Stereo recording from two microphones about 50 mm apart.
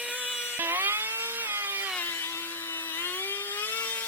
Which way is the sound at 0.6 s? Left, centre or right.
Right.